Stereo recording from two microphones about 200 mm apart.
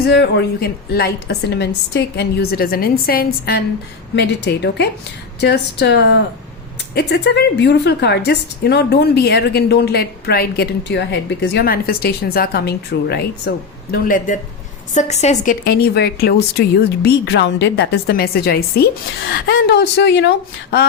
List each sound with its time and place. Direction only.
0.0 s a woman's voice: 55° left (ahead or behind)
4.1 s a woman's voice: 60° left (ahead or behind)
13.9 s a woman's voice: 40° left (ahead or behind)
15.6 s a woman's voice: 50° left (ahead or behind)